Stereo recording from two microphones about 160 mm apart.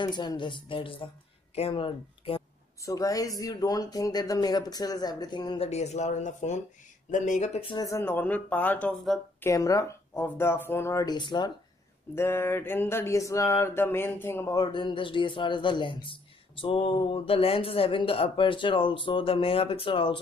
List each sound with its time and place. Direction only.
0.0 s mantra: 30° left (ahead or behind)
1.5 s speech: 35° left (ahead or behind)
2.8 s speech: 20° left (ahead or behind)
5.7 s speech: 45° left (ahead or behind)
7.7 s speech: 20° left (ahead or behind)
9.4 s speech: 20° left (ahead or behind)
12.2 s mantra: 15° left (ahead or behind); by 20.2 s 35° left (ahead or behind)